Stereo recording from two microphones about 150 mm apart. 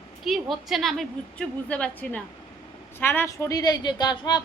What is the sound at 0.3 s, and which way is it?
A woman's voice, centre (ahead or behind).